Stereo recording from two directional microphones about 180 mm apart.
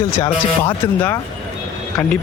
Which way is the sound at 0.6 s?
15° left (ahead or behind).